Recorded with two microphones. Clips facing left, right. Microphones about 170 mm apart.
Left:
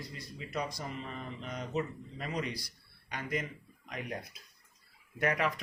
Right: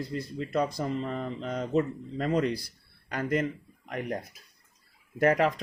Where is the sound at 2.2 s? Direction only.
50° right (ahead or behind).